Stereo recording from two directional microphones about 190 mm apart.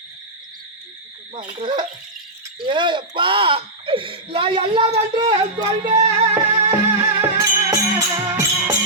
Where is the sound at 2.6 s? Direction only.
25° right (ahead or behind).